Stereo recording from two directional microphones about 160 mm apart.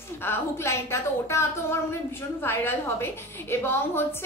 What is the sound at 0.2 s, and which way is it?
A woman's voice, 15° left (ahead or behind).